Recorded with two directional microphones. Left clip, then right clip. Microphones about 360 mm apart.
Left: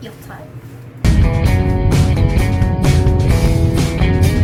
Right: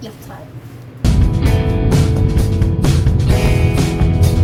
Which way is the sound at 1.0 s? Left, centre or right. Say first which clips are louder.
Left 1 dB; centre.